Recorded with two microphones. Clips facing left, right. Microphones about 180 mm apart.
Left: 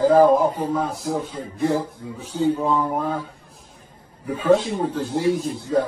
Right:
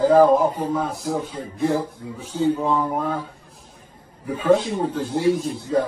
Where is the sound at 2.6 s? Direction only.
Centre (ahead or behind).